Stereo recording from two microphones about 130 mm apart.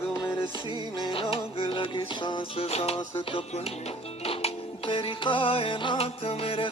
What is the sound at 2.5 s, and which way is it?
Music, 50° left (ahead or behind).